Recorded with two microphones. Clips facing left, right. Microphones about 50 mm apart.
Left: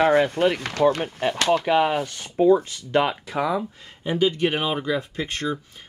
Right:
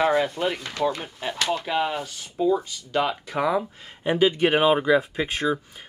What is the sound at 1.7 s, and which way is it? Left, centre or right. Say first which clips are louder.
Speech: left 6 dB; left.